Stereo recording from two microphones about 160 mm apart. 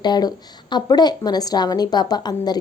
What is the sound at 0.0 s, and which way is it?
A woman's voice, 25° left (ahead or behind).